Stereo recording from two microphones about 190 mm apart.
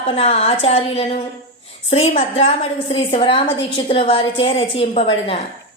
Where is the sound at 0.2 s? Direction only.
30° left (ahead or behind).